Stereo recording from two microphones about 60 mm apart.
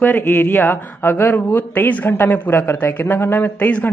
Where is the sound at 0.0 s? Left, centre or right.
Left.